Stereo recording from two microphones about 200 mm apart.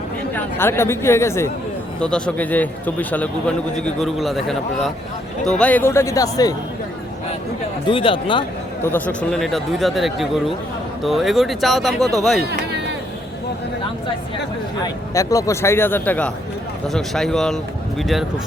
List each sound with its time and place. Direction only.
0.3 s a man's voice: 10° left (ahead or behind)
7.9 s speech: 25° left (ahead or behind)
8.8 s a man's voice: 10° left (ahead or behind)
12.4 s speech: 55° right (ahead or behind)
15.1 s a man's voice: 15° left (ahead or behind); by 18.3 s centre (ahead or behind)